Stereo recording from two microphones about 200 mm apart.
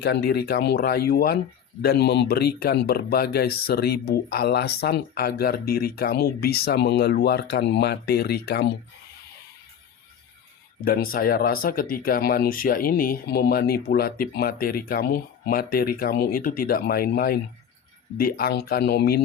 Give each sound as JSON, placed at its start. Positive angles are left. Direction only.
{"t": 0.0, "sound": "speech", "side_deg": 55}
{"t": 10.8, "sound": "speech", "side_deg": 50}